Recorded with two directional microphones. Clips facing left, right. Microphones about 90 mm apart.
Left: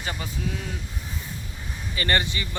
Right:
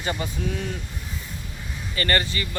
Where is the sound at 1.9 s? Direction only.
15° left (ahead or behind).